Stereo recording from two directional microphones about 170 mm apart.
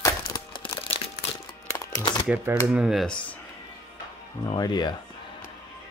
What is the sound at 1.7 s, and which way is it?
Music, 20° left (ahead or behind).